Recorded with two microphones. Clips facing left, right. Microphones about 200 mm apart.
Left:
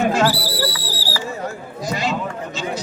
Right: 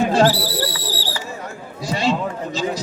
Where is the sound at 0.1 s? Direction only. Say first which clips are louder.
Right 3 dB; 35° right (ahead or behind).